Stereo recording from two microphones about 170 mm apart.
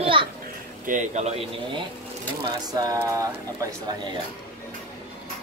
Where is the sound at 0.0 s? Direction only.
30° right (ahead or behind).